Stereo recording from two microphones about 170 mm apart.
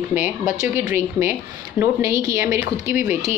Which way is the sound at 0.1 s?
10° right (ahead or behind).